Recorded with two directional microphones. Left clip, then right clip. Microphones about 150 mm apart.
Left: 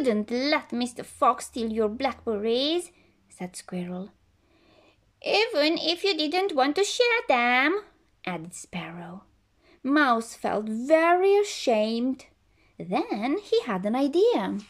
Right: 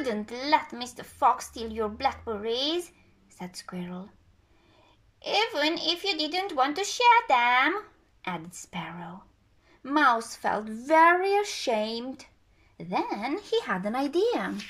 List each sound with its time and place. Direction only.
0.0 s a woman's voice: 30° left (ahead or behind)
5.2 s a woman's voice: 30° left (ahead or behind)